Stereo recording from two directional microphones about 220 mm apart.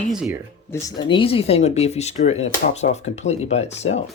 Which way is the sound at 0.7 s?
20° left (ahead or behind).